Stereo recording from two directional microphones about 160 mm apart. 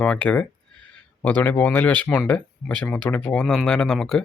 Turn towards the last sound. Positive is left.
turn(degrees=5)  # may be behind; listen again after turning